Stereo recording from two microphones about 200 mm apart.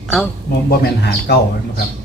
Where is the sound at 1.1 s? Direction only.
55° left (ahead or behind).